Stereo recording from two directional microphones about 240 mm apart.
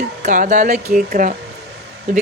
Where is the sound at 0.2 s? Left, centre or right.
Right.